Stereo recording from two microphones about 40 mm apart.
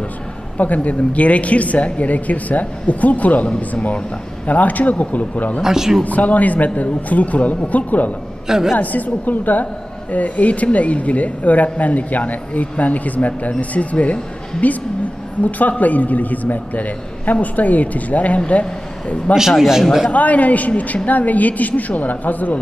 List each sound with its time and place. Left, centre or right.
0.8 s speech: left
5.6 s speech: centre
6.0 s speech: left
8.5 s speech: centre
8.7 s a man's voice: left
15.8 s a man's voice: left
19.3 s a man's voice: centre
20.1 s speech: left